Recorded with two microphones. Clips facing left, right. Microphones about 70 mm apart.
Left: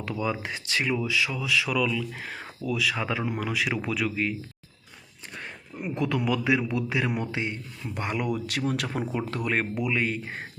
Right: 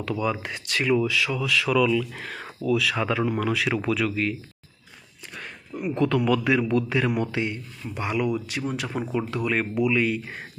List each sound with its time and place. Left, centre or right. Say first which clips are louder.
0.2 s speech: right 2 dB; centre
6.0 s speech: right 4 dB; centre
7.3 s speech: right 3 dB; left
7.9 s speech: right 4 dB; left
8.4 s speech: left 1 dB; left
8.9 s speech: right 2 dB; left